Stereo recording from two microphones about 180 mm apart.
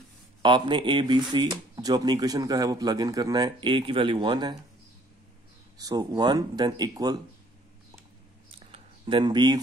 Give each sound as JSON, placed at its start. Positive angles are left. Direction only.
{"t": 0.4, "sound": "speech", "side_deg": -25}
{"t": 5.8, "sound": "speech", "side_deg": -20}
{"t": 8.7, "sound": "a sound", "side_deg": -30}